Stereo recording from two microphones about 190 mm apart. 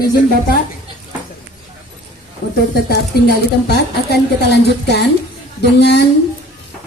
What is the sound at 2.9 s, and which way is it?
Speech, 60° left (ahead or behind).